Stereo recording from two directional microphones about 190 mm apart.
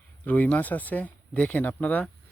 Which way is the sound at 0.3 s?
10° left (ahead or behind).